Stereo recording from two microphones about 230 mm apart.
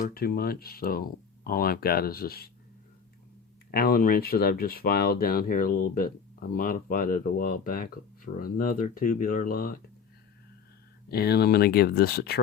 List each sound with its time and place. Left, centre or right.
0.0 s speech: left
3.7 s speech: left
11.1 s speech: left